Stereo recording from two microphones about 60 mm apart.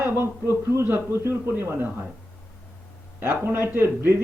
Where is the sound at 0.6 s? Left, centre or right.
Right.